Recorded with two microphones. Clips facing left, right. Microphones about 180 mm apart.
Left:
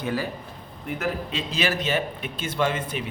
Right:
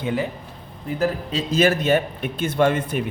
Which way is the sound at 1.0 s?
40° right (ahead or behind).